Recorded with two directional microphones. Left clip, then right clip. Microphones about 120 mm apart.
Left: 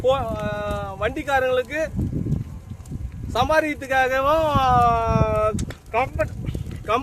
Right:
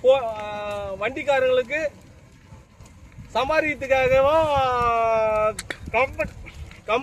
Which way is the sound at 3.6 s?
25° left (ahead or behind).